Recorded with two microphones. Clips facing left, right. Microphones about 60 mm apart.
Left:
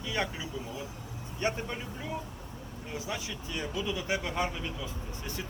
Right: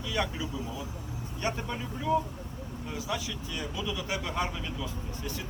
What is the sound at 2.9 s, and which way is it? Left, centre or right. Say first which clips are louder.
Speech: right 2 dB; left.